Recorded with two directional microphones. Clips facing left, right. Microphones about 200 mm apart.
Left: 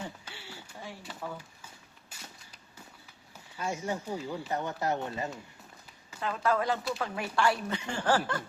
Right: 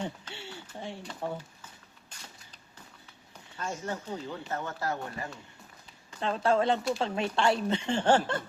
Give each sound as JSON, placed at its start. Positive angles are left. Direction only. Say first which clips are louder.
{"t": 0.3, "sound": "a sound", "louder": "right 4 dB", "side_deg": -25}
{"t": 2.1, "sound": "cap gun", "louder": "left 1 dB", "side_deg": 5}
{"t": 3.6, "sound": "speech", "louder": "left 2 dB", "side_deg": 10}
{"t": 6.1, "sound": "a woman's voice", "louder": "right 3 dB", "side_deg": -30}